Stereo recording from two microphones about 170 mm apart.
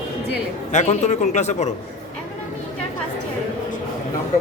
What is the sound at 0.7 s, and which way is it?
Speech, 40° left (ahead or behind).